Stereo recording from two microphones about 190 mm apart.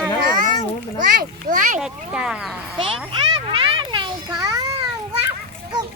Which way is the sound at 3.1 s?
25° right (ahead or behind).